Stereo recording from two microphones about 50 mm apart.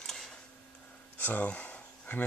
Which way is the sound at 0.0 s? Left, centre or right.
Centre.